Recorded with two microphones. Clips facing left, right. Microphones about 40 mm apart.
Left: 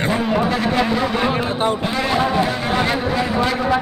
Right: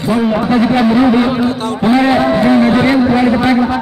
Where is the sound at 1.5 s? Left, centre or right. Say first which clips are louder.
Right 1 dB; left.